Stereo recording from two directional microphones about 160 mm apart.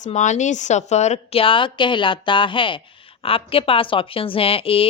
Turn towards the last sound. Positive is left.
turn(degrees=35)  # may be behind; listen again after turning